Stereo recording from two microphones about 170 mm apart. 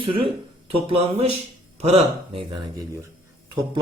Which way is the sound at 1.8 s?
35° right (ahead or behind).